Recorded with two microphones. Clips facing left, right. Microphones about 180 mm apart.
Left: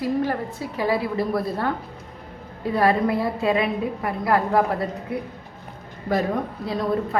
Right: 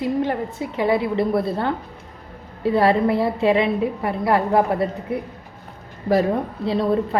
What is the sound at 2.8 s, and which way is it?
A woman's voice, 30° right (ahead or behind).